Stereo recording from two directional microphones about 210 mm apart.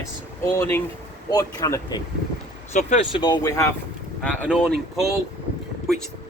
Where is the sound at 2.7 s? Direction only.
35° left (ahead or behind).